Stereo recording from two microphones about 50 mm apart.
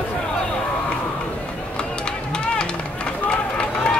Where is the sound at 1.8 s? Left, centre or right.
Centre.